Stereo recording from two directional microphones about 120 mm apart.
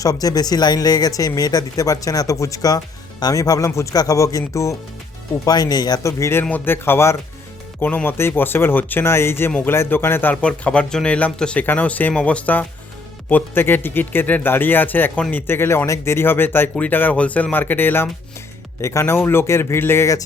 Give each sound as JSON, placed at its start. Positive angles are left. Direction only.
{"t": 0.0, "sound": "speech", "side_deg": 30}